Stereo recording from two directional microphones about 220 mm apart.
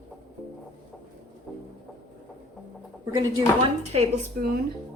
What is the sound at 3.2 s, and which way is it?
Speech, 20° right (ahead or behind).